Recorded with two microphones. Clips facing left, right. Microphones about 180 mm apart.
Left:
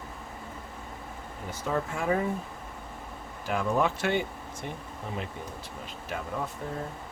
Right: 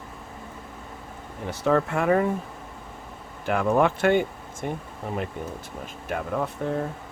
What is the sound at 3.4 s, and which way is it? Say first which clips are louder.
Speech: right 5 dB; 60° right (ahead or behind).